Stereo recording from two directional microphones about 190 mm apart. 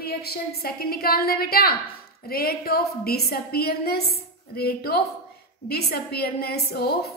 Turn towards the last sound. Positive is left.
turn(degrees=55)  # may be behind; listen again after turning